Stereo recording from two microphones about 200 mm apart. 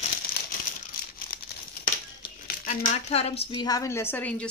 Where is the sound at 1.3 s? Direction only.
50° left (ahead or behind).